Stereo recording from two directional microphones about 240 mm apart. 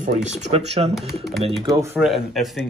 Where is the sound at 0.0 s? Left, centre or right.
Right.